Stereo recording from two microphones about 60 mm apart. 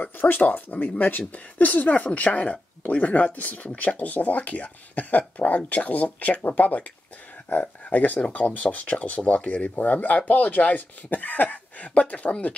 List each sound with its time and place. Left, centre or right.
0.0 s speech: left